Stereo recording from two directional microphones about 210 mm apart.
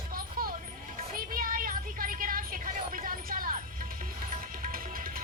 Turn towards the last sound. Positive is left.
turn(degrees=-45)  # may be behind; listen again after turning